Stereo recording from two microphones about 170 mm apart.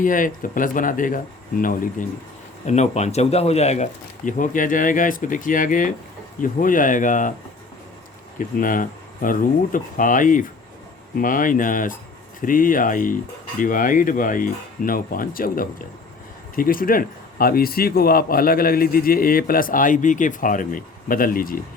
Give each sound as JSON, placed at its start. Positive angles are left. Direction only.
{"t": 0.0, "sound": "speech", "side_deg": 50}
{"t": 2.6, "sound": "speech", "side_deg": 40}
{"t": 4.3, "sound": "speech", "side_deg": 50}
{"t": 8.4, "sound": "speech", "side_deg": 50}